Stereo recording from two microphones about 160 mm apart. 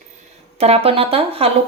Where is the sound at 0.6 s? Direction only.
40° right (ahead or behind).